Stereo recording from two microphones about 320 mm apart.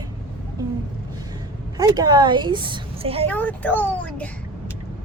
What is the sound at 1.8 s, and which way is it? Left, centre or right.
Speech, centre.